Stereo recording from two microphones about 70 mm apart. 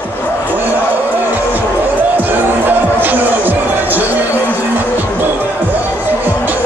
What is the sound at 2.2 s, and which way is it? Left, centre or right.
Music, right.